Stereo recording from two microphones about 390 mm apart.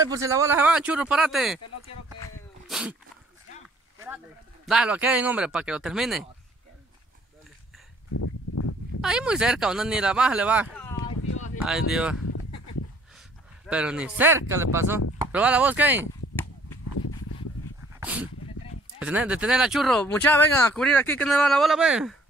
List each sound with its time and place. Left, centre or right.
0.0 s speech: centre
2.2 s a sound: centre
4.6 s speech: centre
8.1 s a sound: left
9.0 s speech: centre
13.7 s speech: centre
18.0 s speech: centre